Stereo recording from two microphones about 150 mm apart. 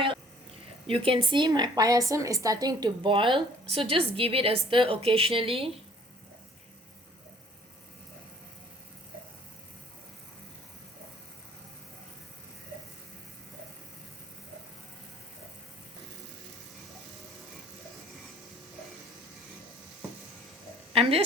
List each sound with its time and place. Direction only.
0.9 s a woman's voice: 35° right (ahead or behind)
20.9 s a woman's voice: 40° right (ahead or behind)